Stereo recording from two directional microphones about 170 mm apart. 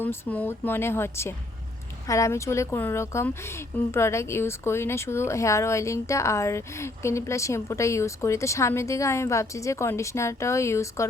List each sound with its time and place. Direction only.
0.0 s speech: 10° left (ahead or behind)